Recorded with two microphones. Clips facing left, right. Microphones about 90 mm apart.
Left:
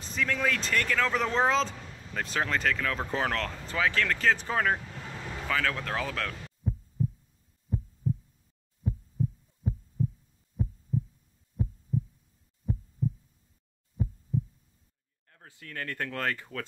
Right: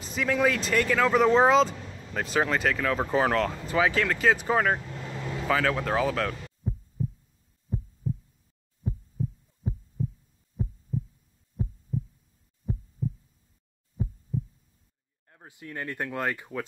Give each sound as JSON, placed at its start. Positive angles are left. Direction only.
{"t": 0.0, "sound": "speech", "side_deg": -5}
{"t": 5.5, "sound": "heart murmur", "side_deg": -10}
{"t": 8.0, "sound": "pulse", "side_deg": 0}
{"t": 13.0, "sound": "heart sounds", "side_deg": 0}
{"t": 14.3, "sound": "pulse", "side_deg": 0}
{"t": 15.3, "sound": "speech", "side_deg": -20}